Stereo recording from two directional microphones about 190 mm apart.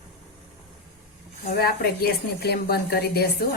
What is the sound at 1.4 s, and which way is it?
A woman's voice, 55° left (ahead or behind).